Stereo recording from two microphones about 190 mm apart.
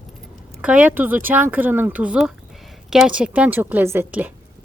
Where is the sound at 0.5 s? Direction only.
5° right (ahead or behind).